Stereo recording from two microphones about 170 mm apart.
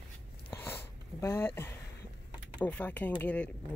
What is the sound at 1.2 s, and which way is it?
Speech, 15° left (ahead or behind).